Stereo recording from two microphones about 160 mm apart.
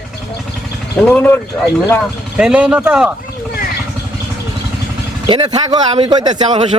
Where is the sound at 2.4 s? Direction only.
5° right (ahead or behind).